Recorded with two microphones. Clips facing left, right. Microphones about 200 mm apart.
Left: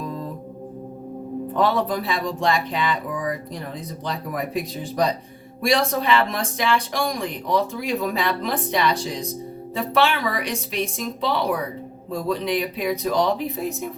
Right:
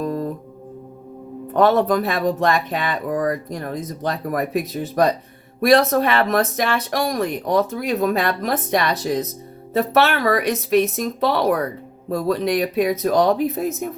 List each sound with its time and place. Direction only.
0.0 s music: 50° right (ahead or behind)
1.5 s a woman's voice: 50° right (ahead or behind)